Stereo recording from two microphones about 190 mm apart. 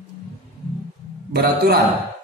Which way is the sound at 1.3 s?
55° right (ahead or behind).